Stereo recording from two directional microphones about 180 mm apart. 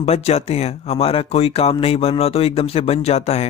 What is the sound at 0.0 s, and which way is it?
Speech, 35° left (ahead or behind).